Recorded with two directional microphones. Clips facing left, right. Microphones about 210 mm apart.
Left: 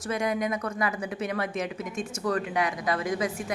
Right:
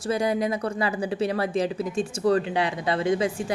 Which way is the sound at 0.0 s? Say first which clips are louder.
Right 4 dB; 30° right (ahead or behind).